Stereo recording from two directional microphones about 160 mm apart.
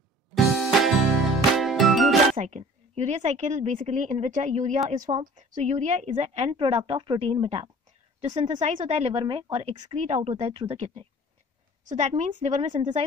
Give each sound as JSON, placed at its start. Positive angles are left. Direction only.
{"t": 0.3, "sound": "music", "side_deg": 0}
{"t": 2.3, "sound": "a woman's voice", "side_deg": -45}
{"t": 8.4, "sound": "a woman's voice", "side_deg": -50}
{"t": 9.9, "sound": "a woman's voice", "side_deg": -45}
{"t": 11.8, "sound": "a woman's voice", "side_deg": -50}